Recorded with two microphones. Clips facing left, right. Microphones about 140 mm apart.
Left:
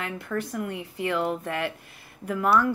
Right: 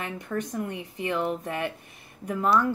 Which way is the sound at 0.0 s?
20° right (ahead or behind).